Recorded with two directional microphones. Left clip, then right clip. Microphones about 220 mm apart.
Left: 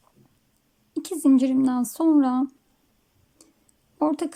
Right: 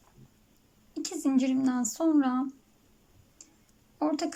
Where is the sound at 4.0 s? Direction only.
15° left (ahead or behind).